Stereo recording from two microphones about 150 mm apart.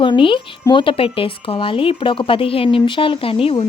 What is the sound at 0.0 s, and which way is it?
A woman's voice, 35° left (ahead or behind).